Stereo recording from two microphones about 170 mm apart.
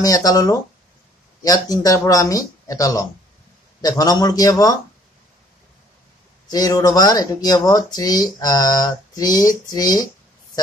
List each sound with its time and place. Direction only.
0.0 s speech: 20° left (ahead or behind)
6.5 s speech: 20° left (ahead or behind)